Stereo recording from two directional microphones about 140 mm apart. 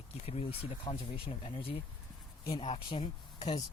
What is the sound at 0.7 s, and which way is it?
Speech, 40° left (ahead or behind).